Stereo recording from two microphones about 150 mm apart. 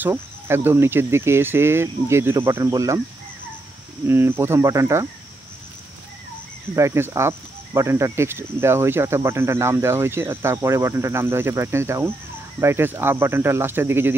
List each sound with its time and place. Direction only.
0.0 s speech: 15° right (ahead or behind)
4.1 s speech: 15° right (ahead or behind)
6.7 s speech: 20° right (ahead or behind)